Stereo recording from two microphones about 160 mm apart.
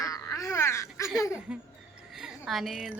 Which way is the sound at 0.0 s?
20° left (ahead or behind).